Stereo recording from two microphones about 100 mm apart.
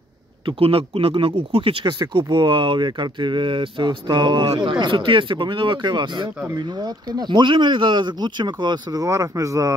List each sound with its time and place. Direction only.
0.5 s speech: 70° right (ahead or behind); by 9.0 s 45° right (ahead or behind)
9.0 s speech: 35° right (ahead or behind)